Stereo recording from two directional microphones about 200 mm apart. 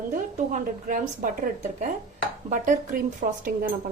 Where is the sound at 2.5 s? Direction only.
40° right (ahead or behind).